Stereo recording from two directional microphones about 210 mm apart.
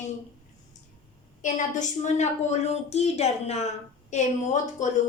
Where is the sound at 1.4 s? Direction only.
35° left (ahead or behind).